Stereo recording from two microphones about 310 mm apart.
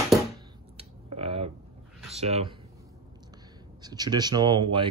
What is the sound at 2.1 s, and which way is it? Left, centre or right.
Speech, centre.